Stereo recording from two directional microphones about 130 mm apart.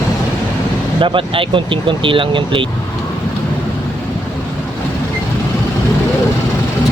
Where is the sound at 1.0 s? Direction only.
40° right (ahead or behind).